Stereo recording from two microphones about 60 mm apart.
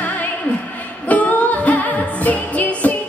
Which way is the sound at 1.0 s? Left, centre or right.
Left.